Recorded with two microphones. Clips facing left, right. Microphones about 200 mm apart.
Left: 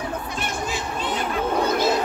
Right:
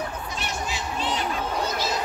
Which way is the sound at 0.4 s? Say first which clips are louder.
Left 1 dB; 50° left (ahead or behind).